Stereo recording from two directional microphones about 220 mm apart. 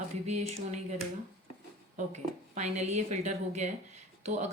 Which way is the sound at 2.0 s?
30° right (ahead or behind).